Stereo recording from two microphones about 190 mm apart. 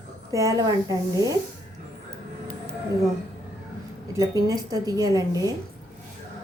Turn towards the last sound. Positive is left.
turn(degrees=-20)  # may be behind; listen again after turning